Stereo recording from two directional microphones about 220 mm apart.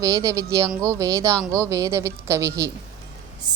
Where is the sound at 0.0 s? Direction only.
15° right (ahead or behind).